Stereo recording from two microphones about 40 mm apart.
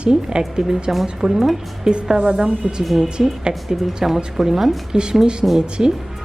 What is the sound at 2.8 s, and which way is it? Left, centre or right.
A woman's voice, centre.